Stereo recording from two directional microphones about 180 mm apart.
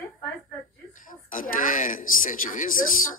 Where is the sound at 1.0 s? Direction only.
50° left (ahead or behind).